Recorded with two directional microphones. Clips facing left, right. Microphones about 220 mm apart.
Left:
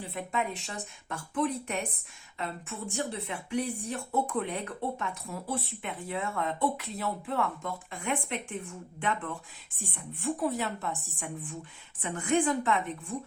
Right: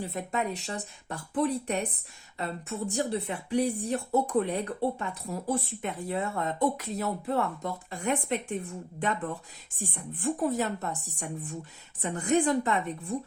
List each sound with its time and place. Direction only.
0.0 s speech: 40° right (ahead or behind)